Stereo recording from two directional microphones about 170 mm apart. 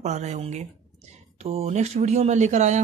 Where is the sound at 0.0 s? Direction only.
40° right (ahead or behind).